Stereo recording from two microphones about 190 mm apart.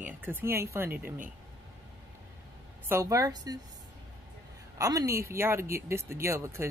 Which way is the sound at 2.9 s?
15° right (ahead or behind).